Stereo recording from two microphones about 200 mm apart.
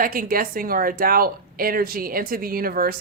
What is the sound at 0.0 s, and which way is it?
Speech, 45° right (ahead or behind).